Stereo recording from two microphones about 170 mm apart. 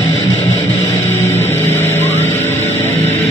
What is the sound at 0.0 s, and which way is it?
Music, 40° left (ahead or behind).